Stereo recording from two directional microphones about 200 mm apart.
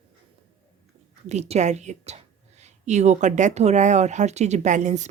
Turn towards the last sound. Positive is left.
turn(degrees=-35)  # may be behind; listen again after turning